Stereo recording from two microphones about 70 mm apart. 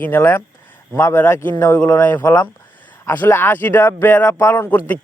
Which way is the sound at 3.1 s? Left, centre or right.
Left.